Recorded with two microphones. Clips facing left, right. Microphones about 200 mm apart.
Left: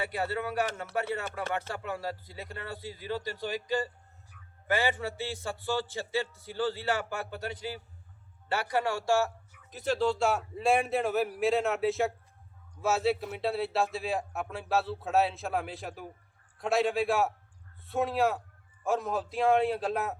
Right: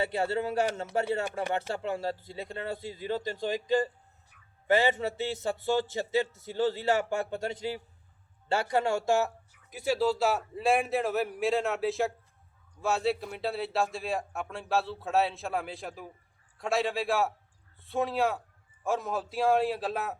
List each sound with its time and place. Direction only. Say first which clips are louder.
0.0 s speech: right 3 dB; 25° right (ahead or behind)
1.2 s speech: right 3 dB; 15° right (ahead or behind)
1.7 s speech: right 4 dB; 25° right (ahead or behind); by 20.1 s centre (ahead or behind)